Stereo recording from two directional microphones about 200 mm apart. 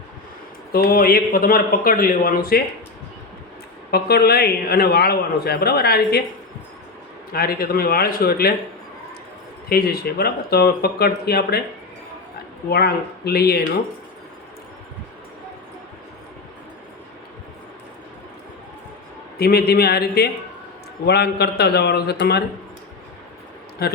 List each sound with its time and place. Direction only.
0.7 s a man's voice: 50° left (ahead or behind)
3.9 s a man's voice: 50° left (ahead or behind)
7.3 s a man's voice: 50° left (ahead or behind)
9.6 s a man's voice: 50° left (ahead or behind)
12.6 s a man's voice: 50° left (ahead or behind)
19.4 s a man's voice: 50° left (ahead or behind)
23.8 s a man's voice: 50° left (ahead or behind)